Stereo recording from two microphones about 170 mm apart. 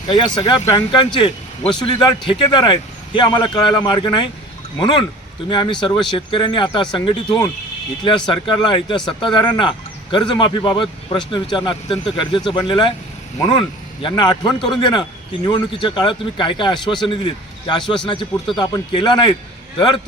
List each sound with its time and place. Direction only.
0.1 s a man's voice: 25° left (ahead or behind)